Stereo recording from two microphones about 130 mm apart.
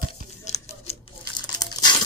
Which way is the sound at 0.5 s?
50° left (ahead or behind).